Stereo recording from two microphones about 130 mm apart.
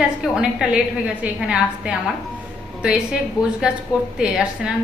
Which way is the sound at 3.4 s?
25° left (ahead or behind).